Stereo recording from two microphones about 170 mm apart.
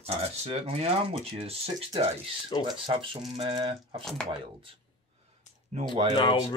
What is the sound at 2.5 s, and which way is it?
Speech, 30° left (ahead or behind).